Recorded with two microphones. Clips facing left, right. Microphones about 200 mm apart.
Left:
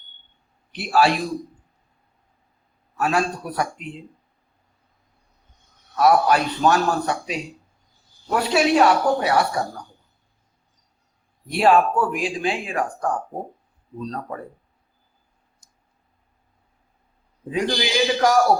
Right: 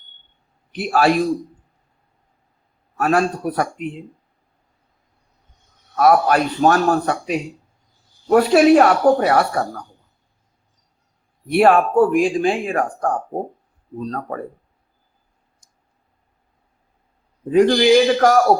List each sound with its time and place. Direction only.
0.7 s a man's voice: 50° right (ahead or behind)
3.0 s speech: 50° right (ahead or behind)
6.0 s speech: 50° right (ahead or behind)
11.5 s speech: 55° right (ahead or behind)
17.5 s speech: 50° right (ahead or behind)